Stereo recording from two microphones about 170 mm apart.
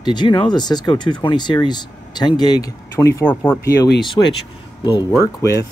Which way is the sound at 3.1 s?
10° left (ahead or behind).